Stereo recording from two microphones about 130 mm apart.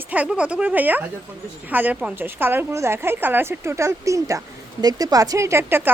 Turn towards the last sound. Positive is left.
turn(degrees=-20)  # may be behind; listen again after turning